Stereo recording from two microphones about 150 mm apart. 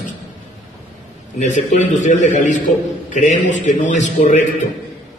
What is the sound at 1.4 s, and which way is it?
A man's voice, 55° left (ahead or behind).